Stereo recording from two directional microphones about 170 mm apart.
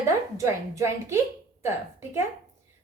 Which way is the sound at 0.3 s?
15° right (ahead or behind).